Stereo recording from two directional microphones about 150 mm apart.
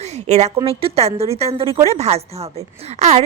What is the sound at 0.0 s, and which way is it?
A woman's voice, 45° right (ahead or behind).